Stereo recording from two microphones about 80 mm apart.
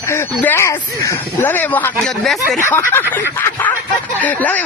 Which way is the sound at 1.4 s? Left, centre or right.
Left.